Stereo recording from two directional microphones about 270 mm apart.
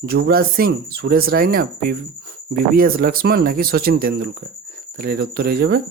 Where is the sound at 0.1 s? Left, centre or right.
Right.